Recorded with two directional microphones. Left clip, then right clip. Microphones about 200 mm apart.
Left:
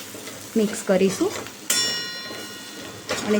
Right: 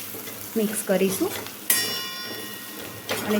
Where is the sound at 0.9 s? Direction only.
20° left (ahead or behind).